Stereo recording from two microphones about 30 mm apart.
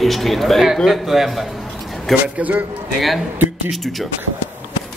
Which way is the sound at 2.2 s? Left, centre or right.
Right.